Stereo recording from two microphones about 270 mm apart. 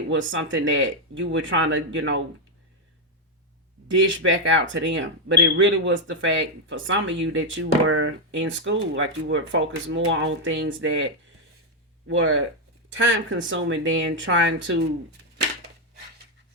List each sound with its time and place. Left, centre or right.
0.1 s speech: right
3.8 s speech: right